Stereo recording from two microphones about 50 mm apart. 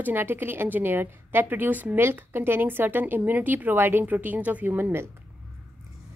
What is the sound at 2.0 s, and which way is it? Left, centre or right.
A woman's voice, right.